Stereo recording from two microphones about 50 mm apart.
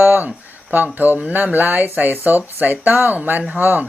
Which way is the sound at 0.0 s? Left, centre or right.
Right.